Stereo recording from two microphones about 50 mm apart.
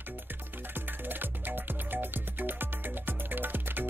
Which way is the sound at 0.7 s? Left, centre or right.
Right.